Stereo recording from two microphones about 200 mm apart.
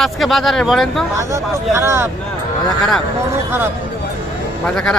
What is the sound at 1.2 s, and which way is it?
Speech, 15° right (ahead or behind).